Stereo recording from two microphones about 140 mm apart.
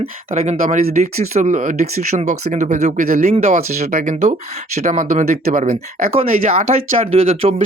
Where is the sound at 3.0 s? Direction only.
90° right.